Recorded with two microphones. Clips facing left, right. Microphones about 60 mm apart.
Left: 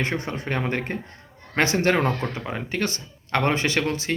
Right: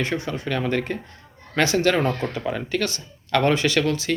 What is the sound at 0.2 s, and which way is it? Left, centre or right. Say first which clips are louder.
Speech: right 2 dB; left.